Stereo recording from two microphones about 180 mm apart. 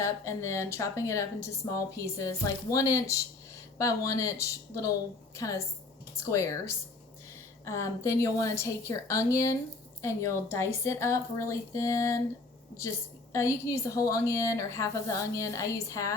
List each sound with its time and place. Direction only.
0.0 s a woman's voice: 15° left (ahead or behind)
13.3 s a woman's voice: 15° left (ahead or behind)